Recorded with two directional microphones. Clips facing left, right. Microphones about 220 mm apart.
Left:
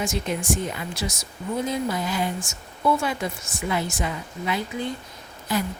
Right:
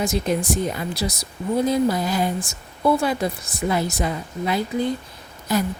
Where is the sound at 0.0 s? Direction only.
35° right (ahead or behind).